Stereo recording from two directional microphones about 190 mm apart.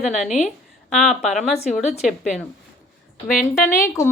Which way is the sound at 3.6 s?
15° left (ahead or behind).